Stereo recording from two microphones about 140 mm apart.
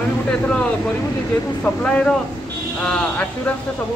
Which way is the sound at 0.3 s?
5° left (ahead or behind).